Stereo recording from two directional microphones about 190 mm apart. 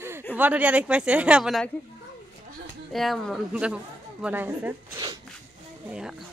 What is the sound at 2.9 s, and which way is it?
A woman's voice, centre (ahead or behind).